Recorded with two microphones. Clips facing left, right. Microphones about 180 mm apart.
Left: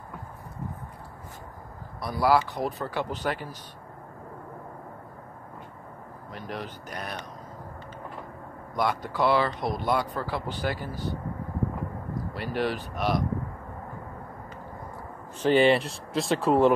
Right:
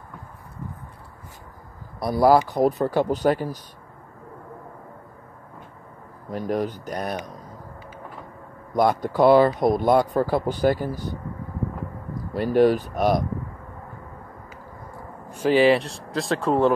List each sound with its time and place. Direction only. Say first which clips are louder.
2.0 s speech: right 6 dB; 40° right (ahead or behind)
6.3 s speech: right 11 dB; 45° right (ahead or behind)
8.7 s speech: right 7 dB; 40° right (ahead or behind)
12.4 s speech: right 12 dB; 45° right (ahead or behind)
15.3 s speech: right 3 dB; 5° right (ahead or behind)